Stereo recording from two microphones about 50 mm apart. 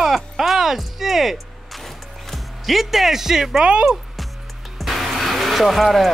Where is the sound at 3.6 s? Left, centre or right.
Centre.